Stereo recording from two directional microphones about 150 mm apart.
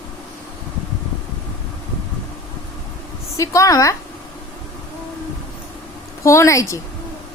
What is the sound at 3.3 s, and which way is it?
Speech, 20° left (ahead or behind).